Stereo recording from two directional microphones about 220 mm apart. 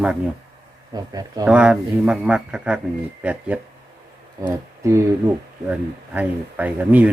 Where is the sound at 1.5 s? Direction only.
5° right (ahead or behind).